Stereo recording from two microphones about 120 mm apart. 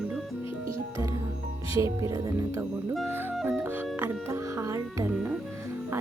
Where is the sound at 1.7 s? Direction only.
25° right (ahead or behind).